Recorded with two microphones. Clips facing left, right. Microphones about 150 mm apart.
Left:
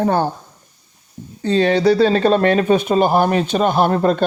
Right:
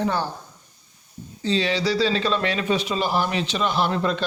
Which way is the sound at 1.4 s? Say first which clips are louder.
Left 9 dB; 50° left (ahead or behind).